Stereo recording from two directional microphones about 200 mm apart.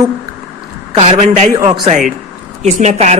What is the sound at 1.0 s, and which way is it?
A man's voice, 30° right (ahead or behind).